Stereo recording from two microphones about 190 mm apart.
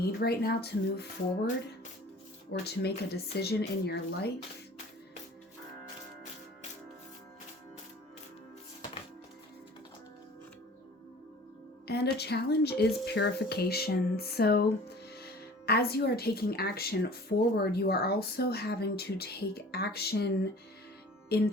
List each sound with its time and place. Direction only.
0.0 s speech: 55° left (ahead or behind)
2.5 s speech: 60° left (ahead or behind)
11.9 s speech: 60° left (ahead or behind)